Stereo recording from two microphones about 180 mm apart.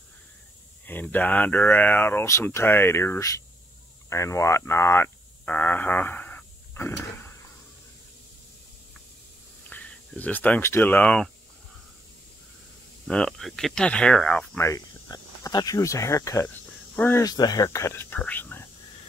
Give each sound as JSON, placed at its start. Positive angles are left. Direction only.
{"t": 0.8, "sound": "speech", "side_deg": 10}
{"t": 9.7, "sound": "speech", "side_deg": 10}
{"t": 13.0, "sound": "speech", "side_deg": 0}
{"t": 14.7, "sound": "speech", "side_deg": 20}